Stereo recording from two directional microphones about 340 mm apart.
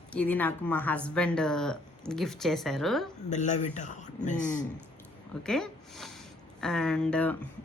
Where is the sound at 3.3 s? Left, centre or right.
Left.